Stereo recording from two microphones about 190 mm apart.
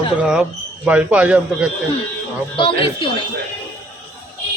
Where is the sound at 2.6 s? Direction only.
30° left (ahead or behind).